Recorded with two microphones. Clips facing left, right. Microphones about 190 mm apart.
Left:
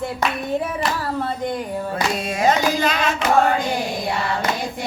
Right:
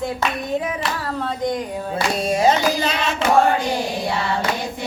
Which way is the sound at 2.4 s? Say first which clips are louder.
Even; 25° right (ahead or behind).